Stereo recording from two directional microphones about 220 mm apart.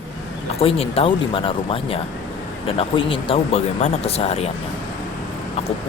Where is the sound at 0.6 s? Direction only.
25° left (ahead or behind).